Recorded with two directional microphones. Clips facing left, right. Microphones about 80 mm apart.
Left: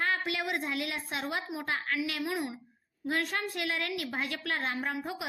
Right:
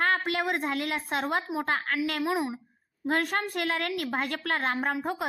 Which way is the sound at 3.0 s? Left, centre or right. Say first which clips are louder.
Right 4 dB; right.